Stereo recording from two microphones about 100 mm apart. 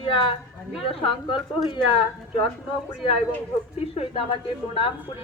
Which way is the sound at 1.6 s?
50° left (ahead or behind).